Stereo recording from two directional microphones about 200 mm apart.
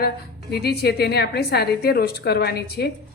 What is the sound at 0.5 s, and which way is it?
A woman's voice, 55° left (ahead or behind).